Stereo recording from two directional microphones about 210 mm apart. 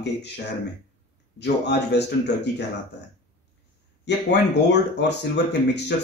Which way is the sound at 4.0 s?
55° left (ahead or behind).